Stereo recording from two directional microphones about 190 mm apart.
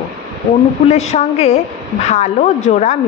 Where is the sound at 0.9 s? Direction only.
35° left (ahead or behind).